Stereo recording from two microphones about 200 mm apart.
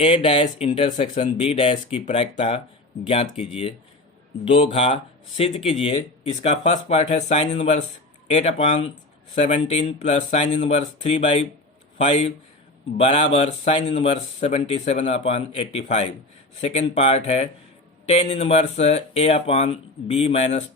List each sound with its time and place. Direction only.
0.0 s speech: 30° left (ahead or behind)